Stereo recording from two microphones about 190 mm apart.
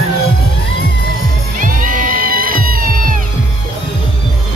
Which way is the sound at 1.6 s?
45° right (ahead or behind).